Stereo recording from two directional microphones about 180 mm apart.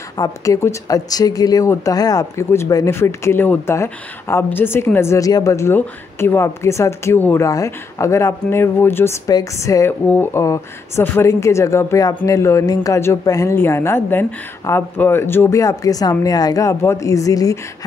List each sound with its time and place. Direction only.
0.2 s speech: 15° left (ahead or behind)